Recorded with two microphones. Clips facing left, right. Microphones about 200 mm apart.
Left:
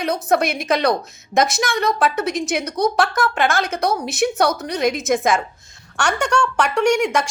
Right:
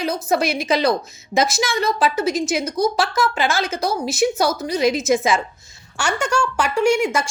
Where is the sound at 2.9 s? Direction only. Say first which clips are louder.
Left 1 dB; 60° left (ahead or behind).